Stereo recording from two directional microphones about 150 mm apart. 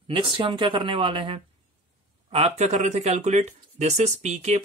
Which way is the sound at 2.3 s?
45° right (ahead or behind).